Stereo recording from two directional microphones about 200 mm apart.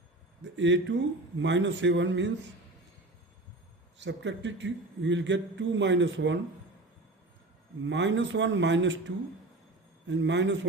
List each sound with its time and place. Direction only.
0.5 s a man's voice: 65° right (ahead or behind)
3.9 s a man's voice: 65° right (ahead or behind)
7.9 s a man's voice: 65° right (ahead or behind)